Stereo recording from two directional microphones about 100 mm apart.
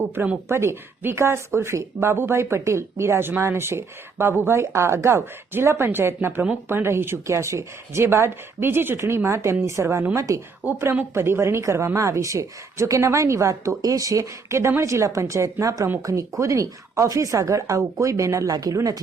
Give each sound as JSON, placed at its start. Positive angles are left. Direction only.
{"t": 0.0, "sound": "a woman's voice", "side_deg": -25}
{"t": 10.6, "sound": "a woman's voice", "side_deg": -20}